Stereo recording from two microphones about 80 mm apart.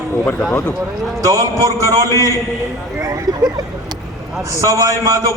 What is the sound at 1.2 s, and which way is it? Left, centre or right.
A man's voice, right.